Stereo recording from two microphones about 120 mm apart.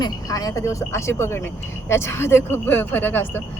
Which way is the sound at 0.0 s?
30° left (ahead or behind).